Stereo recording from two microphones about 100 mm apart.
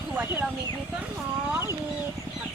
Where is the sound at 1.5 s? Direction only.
25° right (ahead or behind).